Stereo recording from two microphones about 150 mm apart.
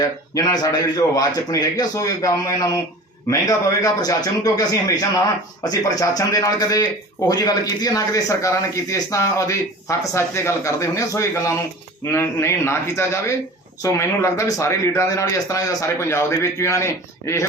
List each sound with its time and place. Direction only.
0.0 s a man's voice: 25° left (ahead or behind)